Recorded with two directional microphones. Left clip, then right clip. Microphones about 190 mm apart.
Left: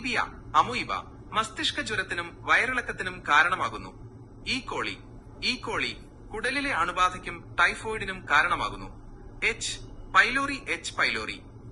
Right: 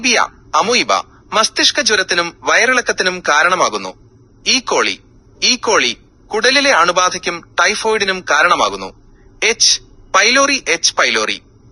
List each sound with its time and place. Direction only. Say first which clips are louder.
0.0 s speech: right 15 dB; 50° right (ahead or behind)